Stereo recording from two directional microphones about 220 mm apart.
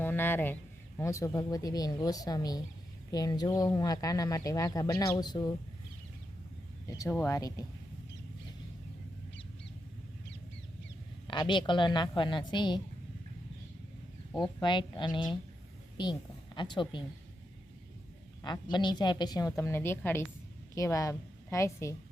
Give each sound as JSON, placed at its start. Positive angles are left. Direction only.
{"t": 0.0, "sound": "speech", "side_deg": 10}
{"t": 6.8, "sound": "speech", "side_deg": 15}
{"t": 11.3, "sound": "a woman's voice", "side_deg": 20}
{"t": 14.3, "sound": "a woman's voice", "side_deg": 20}
{"t": 16.6, "sound": "a woman's voice", "side_deg": 20}
{"t": 18.4, "sound": "a woman's voice", "side_deg": 20}